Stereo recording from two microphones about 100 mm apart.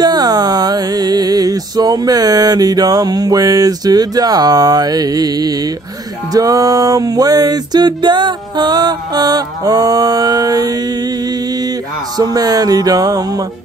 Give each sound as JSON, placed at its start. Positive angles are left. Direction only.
{"t": 0.0, "sound": "music", "side_deg": -45}